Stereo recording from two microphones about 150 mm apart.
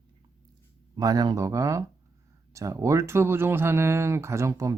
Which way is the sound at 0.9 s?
25° right (ahead or behind).